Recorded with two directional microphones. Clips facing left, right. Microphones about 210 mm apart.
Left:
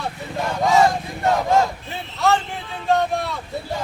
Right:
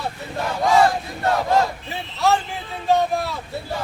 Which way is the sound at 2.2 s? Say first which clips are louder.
Even; centre (ahead or behind).